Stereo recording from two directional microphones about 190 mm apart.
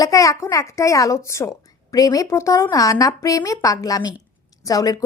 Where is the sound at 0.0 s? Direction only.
15° left (ahead or behind).